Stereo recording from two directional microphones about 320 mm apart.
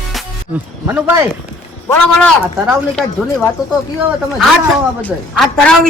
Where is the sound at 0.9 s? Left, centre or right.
Centre.